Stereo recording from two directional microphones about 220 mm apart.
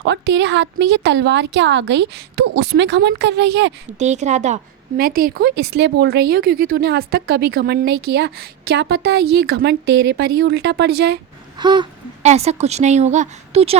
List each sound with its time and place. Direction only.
0.0 s a woman's voice: 50° right (ahead or behind)
3.9 s a woman's voice: 30° right (ahead or behind)
11.6 s a woman's voice: 20° right (ahead or behind)